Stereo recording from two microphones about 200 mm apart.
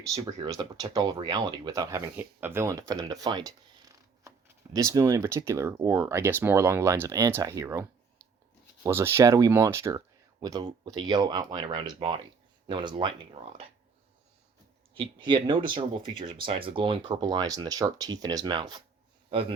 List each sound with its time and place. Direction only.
0.1 s speech: 20° right (ahead or behind)
14.9 s a man's voice: 25° right (ahead or behind)